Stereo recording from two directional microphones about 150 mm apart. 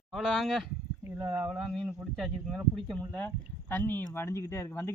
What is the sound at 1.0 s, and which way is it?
Speech, 15° right (ahead or behind).